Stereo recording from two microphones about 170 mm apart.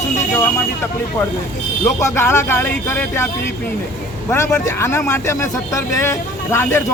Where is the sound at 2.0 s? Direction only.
15° left (ahead or behind).